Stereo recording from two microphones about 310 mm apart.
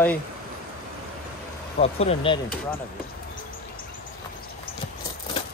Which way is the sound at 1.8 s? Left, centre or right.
Centre.